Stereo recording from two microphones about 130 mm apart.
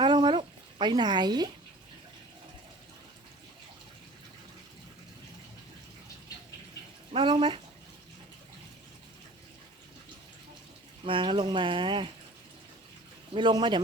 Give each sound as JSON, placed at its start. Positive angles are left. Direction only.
{"t": 0.0, "sound": "a sound", "side_deg": -35}
{"t": 7.1, "sound": "speech", "side_deg": -40}
{"t": 11.0, "sound": "speech", "side_deg": -40}
{"t": 13.3, "sound": "speech", "side_deg": -35}